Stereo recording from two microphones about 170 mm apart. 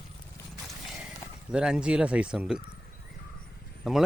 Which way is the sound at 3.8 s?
Centre (ahead or behind).